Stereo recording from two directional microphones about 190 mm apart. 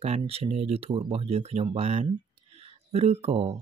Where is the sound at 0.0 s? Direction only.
35° right (ahead or behind).